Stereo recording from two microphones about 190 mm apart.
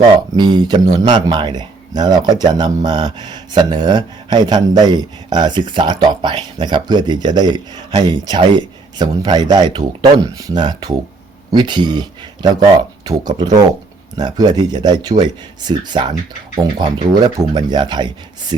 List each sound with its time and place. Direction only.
0.3 s speech: 20° right (ahead or behind)